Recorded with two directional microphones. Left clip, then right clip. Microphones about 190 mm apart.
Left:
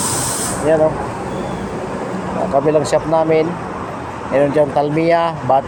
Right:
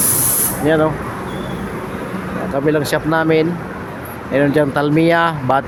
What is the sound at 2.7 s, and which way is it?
Speech, 30° right (ahead or behind).